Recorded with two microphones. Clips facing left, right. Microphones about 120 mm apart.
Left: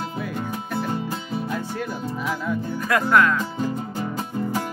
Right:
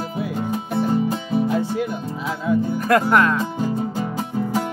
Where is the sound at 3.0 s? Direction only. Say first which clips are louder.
Right 1 dB; 25° right (ahead or behind).